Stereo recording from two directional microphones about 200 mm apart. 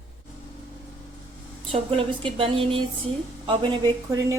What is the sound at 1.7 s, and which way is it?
Speech, 25° right (ahead or behind).